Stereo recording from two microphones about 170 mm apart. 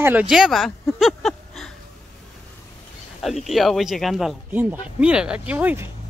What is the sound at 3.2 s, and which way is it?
Speech, centre (ahead or behind).